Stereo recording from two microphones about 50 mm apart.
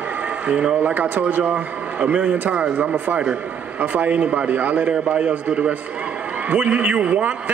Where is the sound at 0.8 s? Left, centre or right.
Right.